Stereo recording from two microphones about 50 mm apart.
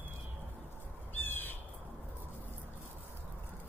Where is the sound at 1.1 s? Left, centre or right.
Left.